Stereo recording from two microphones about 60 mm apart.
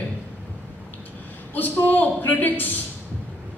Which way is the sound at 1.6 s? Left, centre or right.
Left.